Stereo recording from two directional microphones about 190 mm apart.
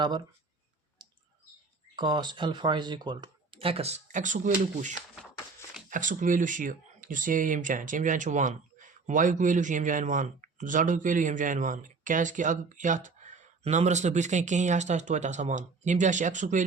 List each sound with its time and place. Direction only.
1.0 s bird: 20° right (ahead or behind)
2.0 s speech: 25° right (ahead or behind); by 16.6 s 40° right (ahead or behind)